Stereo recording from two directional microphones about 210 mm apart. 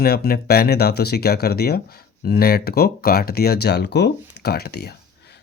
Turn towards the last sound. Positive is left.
turn(degrees=50)  # may be behind; listen again after turning